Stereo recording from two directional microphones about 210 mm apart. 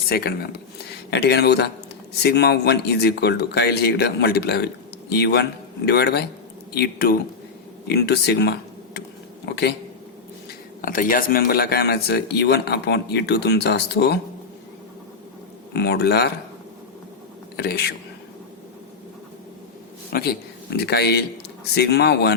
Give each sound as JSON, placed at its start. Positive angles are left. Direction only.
{"t": 0.0, "sound": "speech", "side_deg": 45}
{"t": 10.8, "sound": "speech", "side_deg": 40}
{"t": 15.7, "sound": "speech", "side_deg": 55}
{"t": 17.6, "sound": "speech", "side_deg": 50}
{"t": 20.1, "sound": "speech", "side_deg": 50}